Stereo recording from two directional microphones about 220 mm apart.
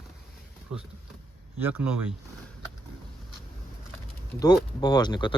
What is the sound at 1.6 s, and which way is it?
Speech, 5° right (ahead or behind).